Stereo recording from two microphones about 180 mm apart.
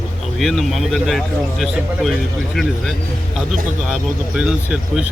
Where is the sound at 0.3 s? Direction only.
Centre (ahead or behind).